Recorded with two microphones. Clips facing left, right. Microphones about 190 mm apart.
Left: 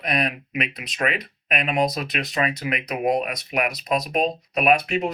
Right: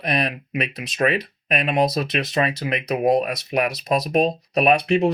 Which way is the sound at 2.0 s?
30° right (ahead or behind).